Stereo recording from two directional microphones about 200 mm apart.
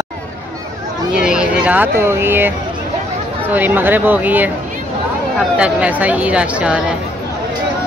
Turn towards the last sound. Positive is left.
turn(degrees=-5)  # may be behind; listen again after turning